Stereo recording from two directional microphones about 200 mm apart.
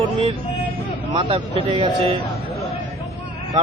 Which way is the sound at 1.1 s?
25° right (ahead or behind).